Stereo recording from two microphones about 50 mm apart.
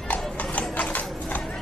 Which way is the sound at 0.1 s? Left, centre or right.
Left.